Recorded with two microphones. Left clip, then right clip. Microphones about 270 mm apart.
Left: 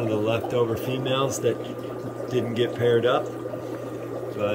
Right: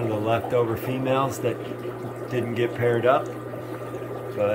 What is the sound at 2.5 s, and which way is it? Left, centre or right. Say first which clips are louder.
Speech: left 2 dB; centre.